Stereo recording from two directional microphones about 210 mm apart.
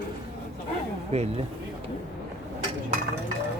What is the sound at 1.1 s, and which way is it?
Speech, 30° right (ahead or behind).